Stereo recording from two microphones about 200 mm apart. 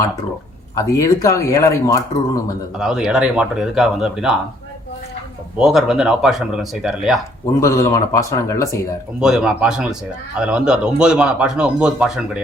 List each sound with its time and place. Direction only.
0.8 s speech: 15° left (ahead or behind)
2.7 s speech: centre (ahead or behind)
5.5 s speech: centre (ahead or behind)
7.6 s speech: 15° left (ahead or behind)
9.2 s speech: 5° right (ahead or behind)